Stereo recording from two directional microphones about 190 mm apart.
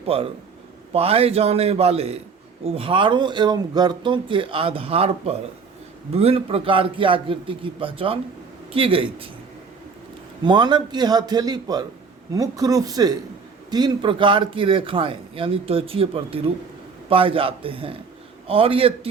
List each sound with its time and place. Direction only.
0.0 s a man's voice: 30° right (ahead or behind)
10.4 s a man's voice: 25° right (ahead or behind)